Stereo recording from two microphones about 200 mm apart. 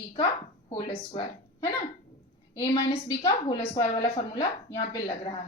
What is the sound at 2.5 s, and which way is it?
A woman's voice, 20° left (ahead or behind).